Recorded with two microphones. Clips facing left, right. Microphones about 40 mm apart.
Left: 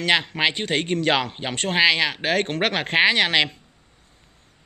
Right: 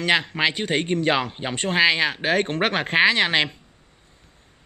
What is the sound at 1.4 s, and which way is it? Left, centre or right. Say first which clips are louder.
A man's voice: right 1 dB; left.